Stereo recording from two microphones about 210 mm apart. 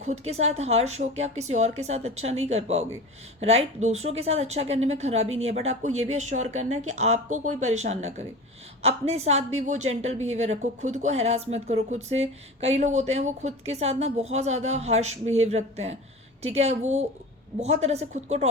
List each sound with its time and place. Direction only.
0.0 s speech: 30° right (ahead or behind)